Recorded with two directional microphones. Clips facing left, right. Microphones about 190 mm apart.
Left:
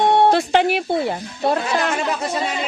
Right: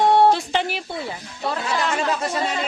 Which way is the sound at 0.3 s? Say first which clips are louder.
Left 4 dB; 65° left (ahead or behind).